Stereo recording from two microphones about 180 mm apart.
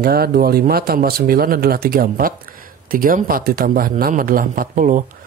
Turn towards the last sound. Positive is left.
turn(degrees=-45)  # may be behind; listen again after turning